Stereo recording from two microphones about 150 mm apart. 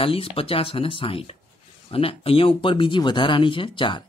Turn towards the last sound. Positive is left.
turn(degrees=35)  # may be behind; listen again after turning